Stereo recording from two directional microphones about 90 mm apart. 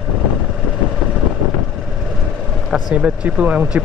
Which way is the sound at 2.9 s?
15° right (ahead or behind).